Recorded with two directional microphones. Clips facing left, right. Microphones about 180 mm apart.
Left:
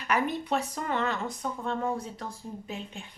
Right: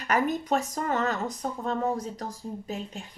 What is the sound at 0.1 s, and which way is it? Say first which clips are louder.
A woman's voice: right 3 dB; 45° right (ahead or behind).